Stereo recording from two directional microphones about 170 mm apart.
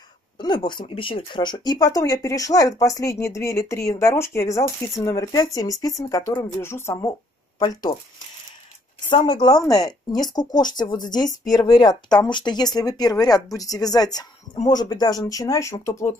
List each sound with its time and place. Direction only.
0.4 s speech: 25° left (ahead or behind)
9.1 s speech: 25° left (ahead or behind)